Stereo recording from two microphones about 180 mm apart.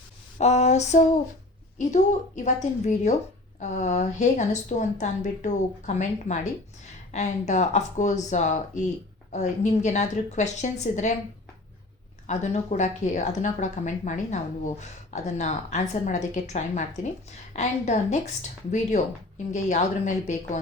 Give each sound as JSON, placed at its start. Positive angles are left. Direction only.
{"t": 0.3, "sound": "a woman's voice", "side_deg": 40}
{"t": 12.3, "sound": "a woman's voice", "side_deg": 40}